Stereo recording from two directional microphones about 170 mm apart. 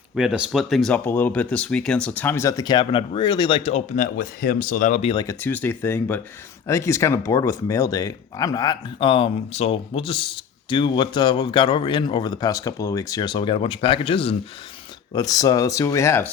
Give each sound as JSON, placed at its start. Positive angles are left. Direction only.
{"t": 0.2, "sound": "speech", "side_deg": -5}
{"t": 5.1, "sound": "speech", "side_deg": 20}
{"t": 15.1, "sound": "speech", "side_deg": 20}